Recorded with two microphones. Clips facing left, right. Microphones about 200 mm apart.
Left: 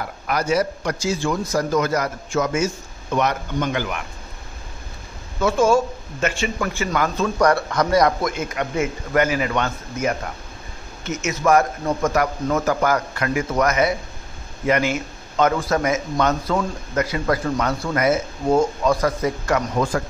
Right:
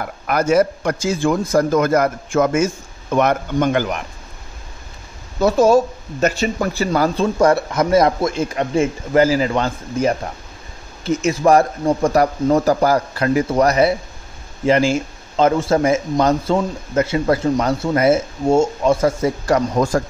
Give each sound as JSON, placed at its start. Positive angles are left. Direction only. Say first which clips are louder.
{"t": 0.3, "sound": "a man's voice", "louder": "right 5 dB", "side_deg": -50}
{"t": 5.4, "sound": "speech", "louder": "right 4 dB", "side_deg": -40}